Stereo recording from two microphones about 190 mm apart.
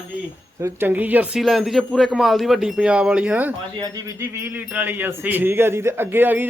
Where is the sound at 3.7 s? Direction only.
20° right (ahead or behind).